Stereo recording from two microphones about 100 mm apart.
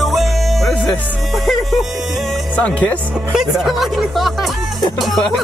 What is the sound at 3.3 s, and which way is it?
Speech, 5° right (ahead or behind).